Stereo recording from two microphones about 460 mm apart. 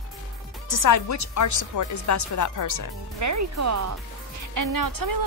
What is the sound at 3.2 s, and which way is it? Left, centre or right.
Speech, right.